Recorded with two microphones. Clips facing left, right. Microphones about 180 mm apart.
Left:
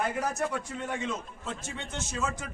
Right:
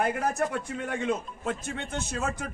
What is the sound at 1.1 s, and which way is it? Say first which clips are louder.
A man's voice: right 6 dB; 55° right (ahead or behind).